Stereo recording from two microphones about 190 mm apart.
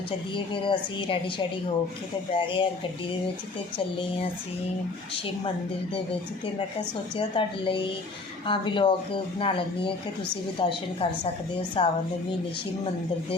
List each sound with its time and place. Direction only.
0.3 s a woman's voice: 25° left (ahead or behind)
2.3 s a woman's voice: 25° left (ahead or behind)
7.2 s a woman's voice: 25° left (ahead or behind)